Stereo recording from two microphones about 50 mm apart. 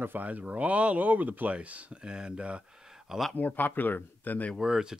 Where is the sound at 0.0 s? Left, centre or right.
Right.